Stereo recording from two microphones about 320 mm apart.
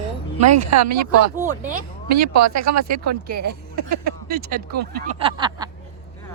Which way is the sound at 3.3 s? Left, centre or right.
Right.